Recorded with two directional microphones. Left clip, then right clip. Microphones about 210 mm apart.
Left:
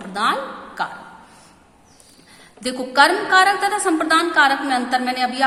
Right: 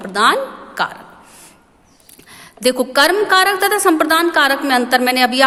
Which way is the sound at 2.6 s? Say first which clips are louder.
Right 2 dB; 45° right (ahead or behind).